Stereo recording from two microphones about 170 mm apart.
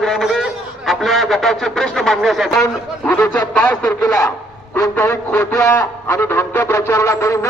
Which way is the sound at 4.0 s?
20° left (ahead or behind).